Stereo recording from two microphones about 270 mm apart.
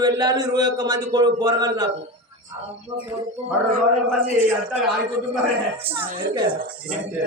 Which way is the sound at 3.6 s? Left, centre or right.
Right.